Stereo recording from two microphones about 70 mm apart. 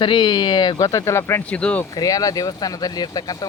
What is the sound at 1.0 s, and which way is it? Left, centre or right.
Speech, left.